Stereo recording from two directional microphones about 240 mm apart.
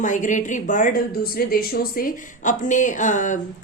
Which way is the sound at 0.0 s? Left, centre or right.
Left.